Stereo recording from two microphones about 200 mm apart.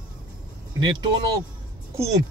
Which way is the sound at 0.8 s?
20° right (ahead or behind).